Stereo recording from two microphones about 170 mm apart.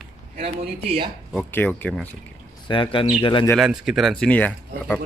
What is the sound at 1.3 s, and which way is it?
Speech, 10° left (ahead or behind).